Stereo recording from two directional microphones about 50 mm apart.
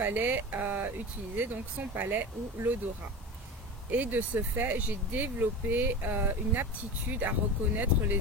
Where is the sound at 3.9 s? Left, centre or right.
Right.